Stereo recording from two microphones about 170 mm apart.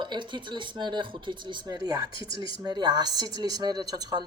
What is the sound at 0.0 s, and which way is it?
Speech, 25° right (ahead or behind).